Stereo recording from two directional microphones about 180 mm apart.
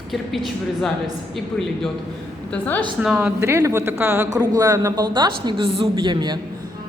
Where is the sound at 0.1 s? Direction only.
Centre (ahead or behind).